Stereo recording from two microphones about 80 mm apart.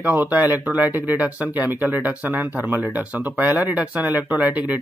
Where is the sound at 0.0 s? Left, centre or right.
Right.